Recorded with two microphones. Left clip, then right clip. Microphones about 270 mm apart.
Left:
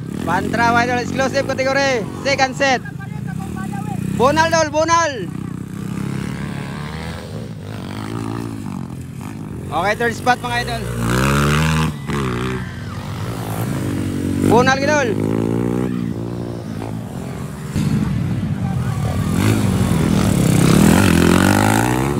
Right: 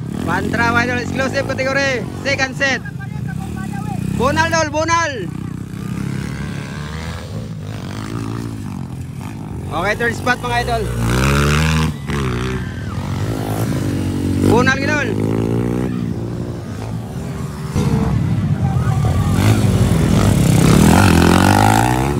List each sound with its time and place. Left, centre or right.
0.3 s speech: centre
4.2 s speech: centre
9.8 s vehicle: centre
13.5 s vehicle: right
14.5 s speech: centre
15.1 s a sound: centre
19.3 s vehicle: centre
20.1 s vehicle: right
20.3 s vehicle: centre